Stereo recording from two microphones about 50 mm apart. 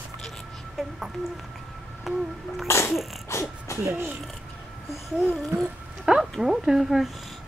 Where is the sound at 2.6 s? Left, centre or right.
Left.